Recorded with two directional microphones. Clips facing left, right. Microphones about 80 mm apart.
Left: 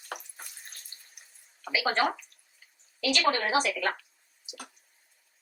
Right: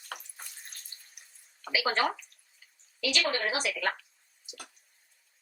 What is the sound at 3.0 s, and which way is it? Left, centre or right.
Speech, left.